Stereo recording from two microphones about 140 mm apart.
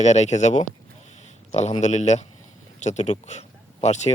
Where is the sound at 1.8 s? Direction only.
55° left (ahead or behind).